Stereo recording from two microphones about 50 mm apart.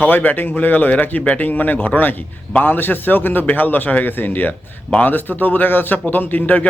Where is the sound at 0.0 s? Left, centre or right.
Left.